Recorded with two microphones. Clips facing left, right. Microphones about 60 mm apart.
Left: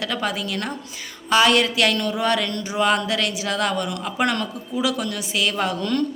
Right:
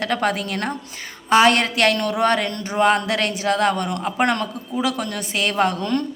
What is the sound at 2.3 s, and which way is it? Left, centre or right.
A woman's voice, right.